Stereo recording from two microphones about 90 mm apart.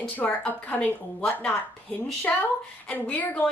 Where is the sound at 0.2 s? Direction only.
15° left (ahead or behind).